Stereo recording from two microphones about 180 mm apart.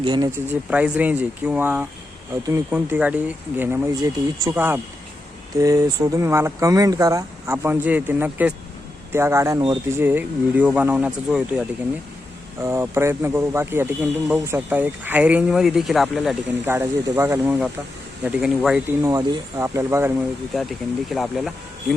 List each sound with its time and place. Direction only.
0.0 s speech: 25° right (ahead or behind)
0.3 s a man's voice: 10° right (ahead or behind)
12.6 s a man's voice: 15° right (ahead or behind)
16.6 s a man's voice: 15° right (ahead or behind)
19.0 s a man's voice: 15° right (ahead or behind)
20.5 s speech: centre (ahead or behind)